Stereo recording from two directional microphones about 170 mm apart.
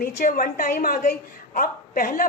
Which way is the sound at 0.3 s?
60° left (ahead or behind).